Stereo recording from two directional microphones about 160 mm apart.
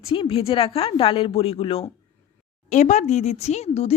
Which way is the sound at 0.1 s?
35° left (ahead or behind).